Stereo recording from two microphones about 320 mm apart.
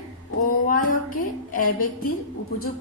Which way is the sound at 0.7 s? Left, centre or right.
Left.